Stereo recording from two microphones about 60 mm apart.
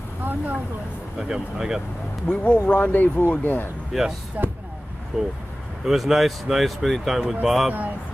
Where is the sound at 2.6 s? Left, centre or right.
Left.